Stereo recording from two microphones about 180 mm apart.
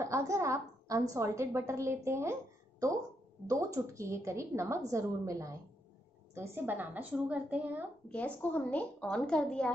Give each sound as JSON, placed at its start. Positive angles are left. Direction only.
{"t": 0.0, "sound": "a woman's voice", "side_deg": -15}
{"t": 3.4, "sound": "a woman's voice", "side_deg": -15}
{"t": 8.1, "sound": "a woman's voice", "side_deg": 10}